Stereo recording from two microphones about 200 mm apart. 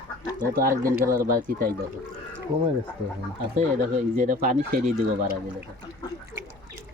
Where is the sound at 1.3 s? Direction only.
45° right (ahead or behind).